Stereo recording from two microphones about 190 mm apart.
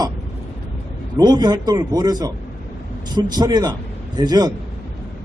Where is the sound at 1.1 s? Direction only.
20° right (ahead or behind).